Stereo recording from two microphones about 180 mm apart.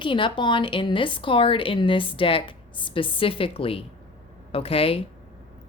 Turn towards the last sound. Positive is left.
turn(degrees=30)  # may be behind; listen again after turning